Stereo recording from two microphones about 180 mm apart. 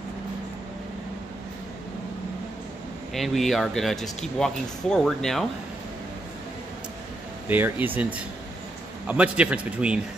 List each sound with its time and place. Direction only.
3.2 s speech: centre (ahead or behind)
7.4 s a man's voice: 10° right (ahead or behind)